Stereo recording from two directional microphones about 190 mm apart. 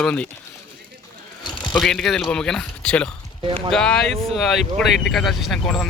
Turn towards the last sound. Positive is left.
turn(degrees=0)  # may be behind; listen again after turning